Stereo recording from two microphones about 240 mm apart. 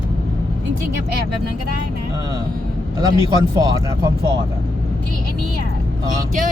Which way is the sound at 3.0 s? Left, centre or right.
Centre.